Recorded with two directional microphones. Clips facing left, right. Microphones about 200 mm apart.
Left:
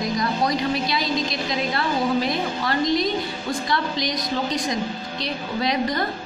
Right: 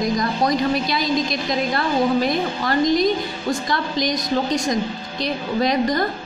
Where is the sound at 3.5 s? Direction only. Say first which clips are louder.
Right 2 dB; 45° right (ahead or behind).